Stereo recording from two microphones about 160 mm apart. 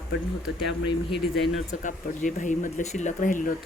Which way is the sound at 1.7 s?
50° left (ahead or behind).